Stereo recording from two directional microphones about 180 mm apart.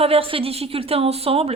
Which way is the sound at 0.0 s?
30° right (ahead or behind).